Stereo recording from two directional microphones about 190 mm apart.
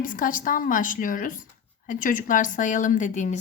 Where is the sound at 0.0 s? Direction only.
45° left (ahead or behind).